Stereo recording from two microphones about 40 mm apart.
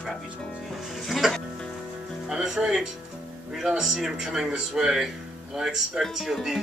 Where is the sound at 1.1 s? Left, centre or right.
Centre.